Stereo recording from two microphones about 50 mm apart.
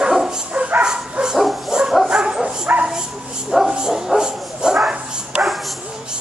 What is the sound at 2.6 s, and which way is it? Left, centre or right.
Bow-wow, right.